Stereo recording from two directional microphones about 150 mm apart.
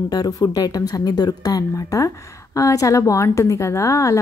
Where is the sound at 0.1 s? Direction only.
25° left (ahead or behind).